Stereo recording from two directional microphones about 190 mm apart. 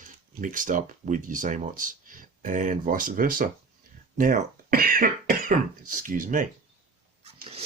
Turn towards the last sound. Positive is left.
turn(degrees=-30)  # may be behind; listen again after turning